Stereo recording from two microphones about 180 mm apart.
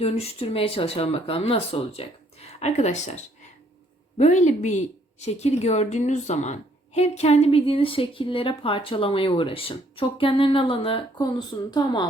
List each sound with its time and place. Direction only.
0.0 s a woman's voice: 35° left (ahead or behind)
4.2 s a woman's voice: 40° left (ahead or behind); by 12.0 s 20° left (ahead or behind)